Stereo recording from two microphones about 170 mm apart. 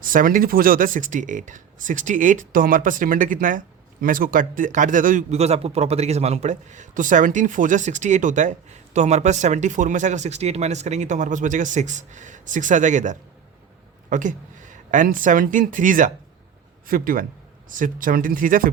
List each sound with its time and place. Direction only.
0.0 s a man's voice: 55° right (ahead or behind)